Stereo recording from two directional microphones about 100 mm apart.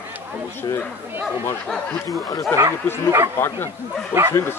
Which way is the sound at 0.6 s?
45° left (ahead or behind).